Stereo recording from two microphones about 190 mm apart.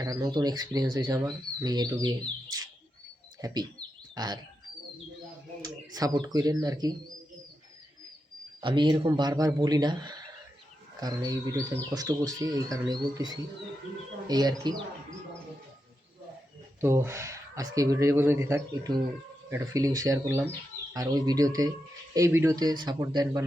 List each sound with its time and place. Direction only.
0.0 s speech: 20° right (ahead or behind)
5.6 s speech: 20° right (ahead or behind)
8.6 s speech: 25° right (ahead or behind)
16.8 s speech: 10° right (ahead or behind)